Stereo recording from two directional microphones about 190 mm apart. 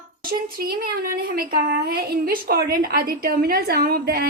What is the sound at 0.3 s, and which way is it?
A woman's voice, 50° right (ahead or behind).